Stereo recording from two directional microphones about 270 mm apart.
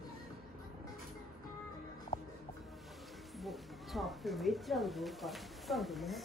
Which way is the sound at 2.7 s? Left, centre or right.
Centre.